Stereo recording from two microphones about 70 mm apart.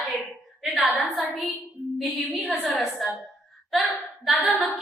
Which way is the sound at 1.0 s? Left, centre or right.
Centre.